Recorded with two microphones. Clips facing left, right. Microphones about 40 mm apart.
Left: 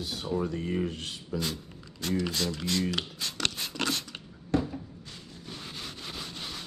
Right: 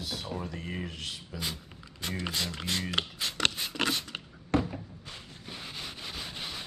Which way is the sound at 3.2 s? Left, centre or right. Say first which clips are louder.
Right 2 dB; centre.